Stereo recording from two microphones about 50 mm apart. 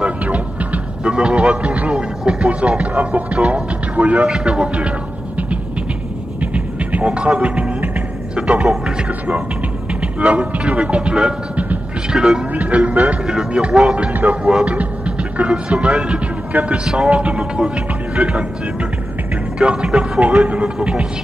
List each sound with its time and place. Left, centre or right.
0.0 s music: right
4.3 s speech: centre
6.4 s music: right
7.3 s speech: right
8.4 s music: centre
8.6 s speech: centre
10.2 s speech: right
12.1 s speech: centre
12.5 s speech: right; by 16.2 s centre
16.5 s speech: right
17.4 s speech: centre
19.6 s speech: centre